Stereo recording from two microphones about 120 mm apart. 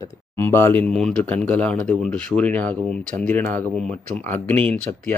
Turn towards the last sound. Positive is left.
turn(degrees=10)  # may be behind; listen again after turning